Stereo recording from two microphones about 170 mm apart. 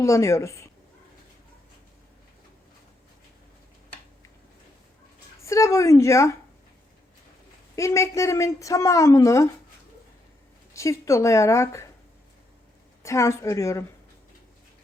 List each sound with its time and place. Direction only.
0.0 s speech: 20° left (ahead or behind)
5.4 s a woman's voice: 15° left (ahead or behind)
7.8 s a woman's voice: 15° left (ahead or behind)
10.8 s speech: 15° left (ahead or behind)
13.0 s speech: 15° left (ahead or behind)